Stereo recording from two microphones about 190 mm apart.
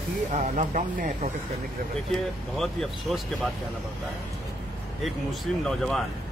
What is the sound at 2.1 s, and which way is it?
A man's voice, centre (ahead or behind).